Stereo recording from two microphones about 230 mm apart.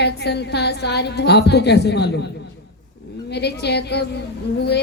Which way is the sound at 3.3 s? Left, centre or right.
Left.